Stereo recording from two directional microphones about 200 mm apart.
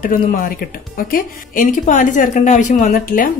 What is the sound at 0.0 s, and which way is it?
A woman's voice, 40° left (ahead or behind).